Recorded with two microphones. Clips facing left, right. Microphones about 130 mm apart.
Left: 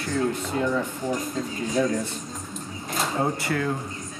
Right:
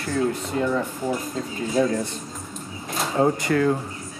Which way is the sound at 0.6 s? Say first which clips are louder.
Right 2 dB; 10° right (ahead or behind).